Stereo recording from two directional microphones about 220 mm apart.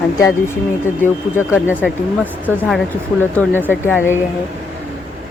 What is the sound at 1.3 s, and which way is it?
Speech, 10° left (ahead or behind).